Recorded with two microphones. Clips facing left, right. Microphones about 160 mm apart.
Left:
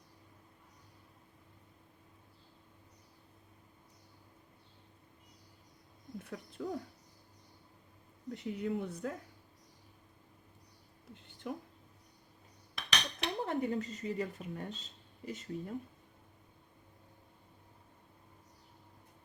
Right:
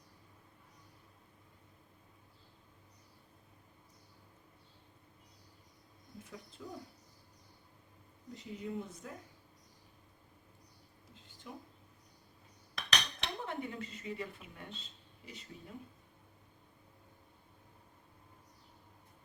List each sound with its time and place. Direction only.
6.2 s speech: 60° left (ahead or behind)
8.3 s speech: 65° left (ahead or behind)
11.1 s a sound: 60° left (ahead or behind)
12.7 s cutlery: 5° left (ahead or behind)
13.4 s speech: 40° left (ahead or behind)